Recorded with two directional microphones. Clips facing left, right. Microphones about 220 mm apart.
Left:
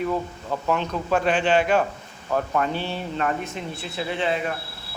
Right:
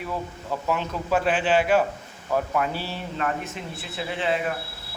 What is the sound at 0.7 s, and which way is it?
Speech, 5° right (ahead or behind).